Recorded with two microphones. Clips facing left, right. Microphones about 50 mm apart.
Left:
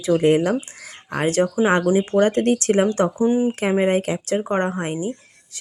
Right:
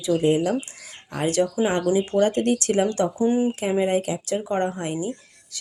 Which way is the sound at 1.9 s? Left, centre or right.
Left.